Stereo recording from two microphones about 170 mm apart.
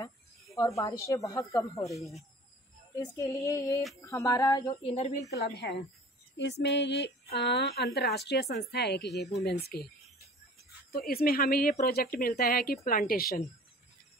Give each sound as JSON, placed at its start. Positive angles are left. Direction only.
{"t": 0.6, "sound": "a woman's voice", "side_deg": 20}
{"t": 3.2, "sound": "a woman's voice", "side_deg": 20}
{"t": 4.8, "sound": "a woman's voice", "side_deg": 35}
{"t": 5.4, "sound": "speech", "side_deg": 85}